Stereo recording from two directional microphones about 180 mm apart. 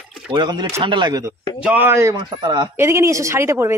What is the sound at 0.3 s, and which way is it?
A man's voice, 25° right (ahead or behind).